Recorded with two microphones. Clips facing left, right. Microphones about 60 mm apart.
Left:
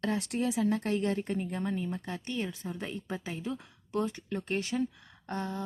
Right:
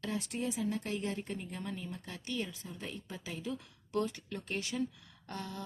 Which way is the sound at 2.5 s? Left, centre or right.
Left.